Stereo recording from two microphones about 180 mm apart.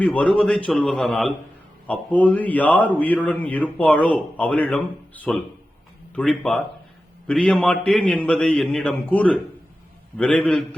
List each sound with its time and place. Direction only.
0.0 s a man's voice: 5° left (ahead or behind)